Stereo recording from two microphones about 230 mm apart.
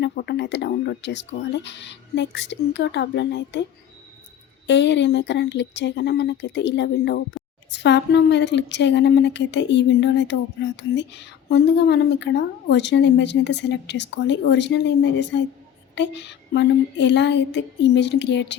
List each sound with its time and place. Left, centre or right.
0.0 s a woman's voice: left
4.6 s a woman's voice: left